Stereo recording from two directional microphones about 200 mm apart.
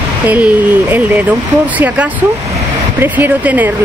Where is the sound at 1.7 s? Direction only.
10° right (ahead or behind).